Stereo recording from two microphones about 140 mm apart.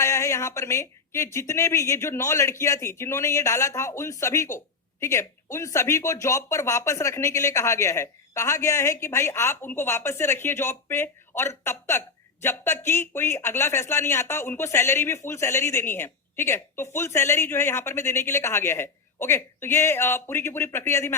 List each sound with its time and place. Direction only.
0.0 s speech: 20° left (ahead or behind)